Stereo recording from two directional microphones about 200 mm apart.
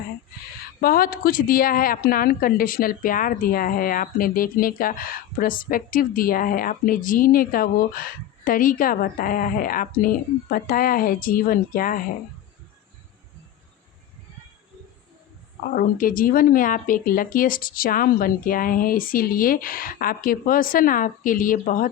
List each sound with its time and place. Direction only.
0.8 s speech: 45° left (ahead or behind)
15.7 s speech: 45° left (ahead or behind)